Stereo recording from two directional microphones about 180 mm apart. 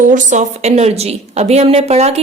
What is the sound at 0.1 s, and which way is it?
A woman's voice, 40° right (ahead or behind).